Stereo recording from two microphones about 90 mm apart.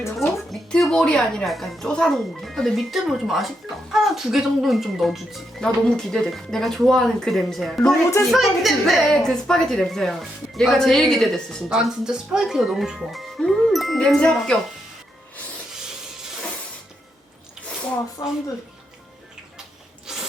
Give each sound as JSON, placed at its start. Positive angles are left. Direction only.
{"t": 0.5, "sound": "a woman's voice", "side_deg": 5}
{"t": 18.2, "sound": "speech", "side_deg": 40}